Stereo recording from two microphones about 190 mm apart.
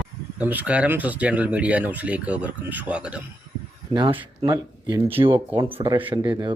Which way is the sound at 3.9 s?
25° right (ahead or behind).